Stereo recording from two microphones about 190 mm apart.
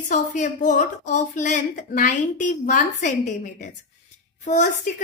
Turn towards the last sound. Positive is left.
turn(degrees=40)  # may be behind; listen again after turning